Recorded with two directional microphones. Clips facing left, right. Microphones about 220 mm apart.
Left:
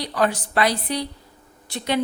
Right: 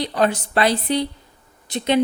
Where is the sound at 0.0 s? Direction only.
25° right (ahead or behind).